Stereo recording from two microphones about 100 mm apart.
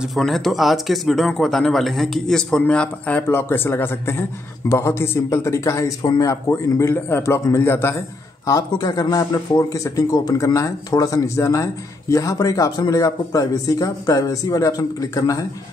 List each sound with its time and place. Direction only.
0.0 s speech: centre (ahead or behind)
3.3 s a man's voice: 25° left (ahead or behind)
8.7 s speech: 45° left (ahead or behind)